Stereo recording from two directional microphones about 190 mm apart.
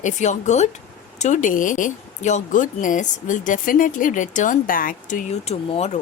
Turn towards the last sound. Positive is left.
turn(degrees=35)  # may be behind; listen again after turning